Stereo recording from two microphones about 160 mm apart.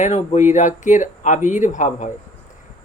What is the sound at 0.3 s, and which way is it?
Speech, 45° left (ahead or behind).